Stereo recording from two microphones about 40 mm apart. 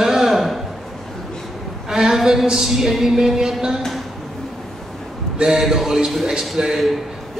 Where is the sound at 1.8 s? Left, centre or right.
Centre.